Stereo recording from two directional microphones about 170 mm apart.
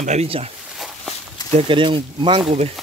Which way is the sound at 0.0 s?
40° right (ahead or behind).